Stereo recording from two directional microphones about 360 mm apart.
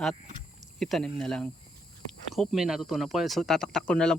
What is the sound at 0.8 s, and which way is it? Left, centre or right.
Speech, centre.